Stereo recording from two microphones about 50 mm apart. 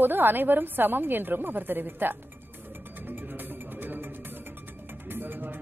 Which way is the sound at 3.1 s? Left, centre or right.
Right.